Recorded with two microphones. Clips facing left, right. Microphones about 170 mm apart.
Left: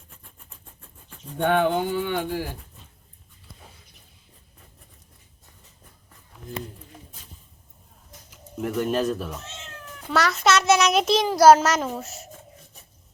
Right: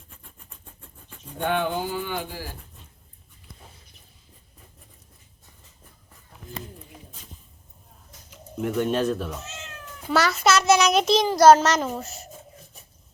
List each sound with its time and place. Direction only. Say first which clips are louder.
1.4 s speech: left 4 dB; 60° left (ahead or behind)
8.6 s a child's voice: right 1 dB; centre (ahead or behind)